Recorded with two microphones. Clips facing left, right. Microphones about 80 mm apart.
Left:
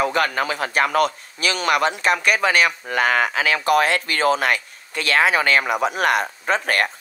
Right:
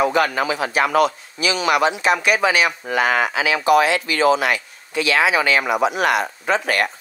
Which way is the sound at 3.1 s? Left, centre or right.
Right.